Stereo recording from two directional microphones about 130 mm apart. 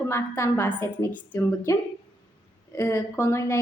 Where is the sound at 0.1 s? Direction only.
20° left (ahead or behind).